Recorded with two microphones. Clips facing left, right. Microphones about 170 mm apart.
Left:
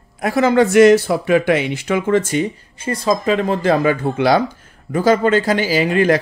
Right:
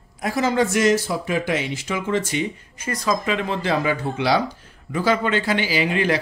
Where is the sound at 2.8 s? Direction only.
30° left (ahead or behind).